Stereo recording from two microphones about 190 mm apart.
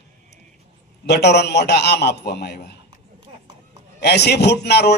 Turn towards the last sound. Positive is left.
turn(degrees=60)  # may be behind; listen again after turning